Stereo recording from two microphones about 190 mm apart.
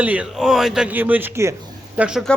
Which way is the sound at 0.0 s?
5° right (ahead or behind).